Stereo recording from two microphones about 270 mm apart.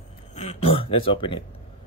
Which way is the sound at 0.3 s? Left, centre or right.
Left.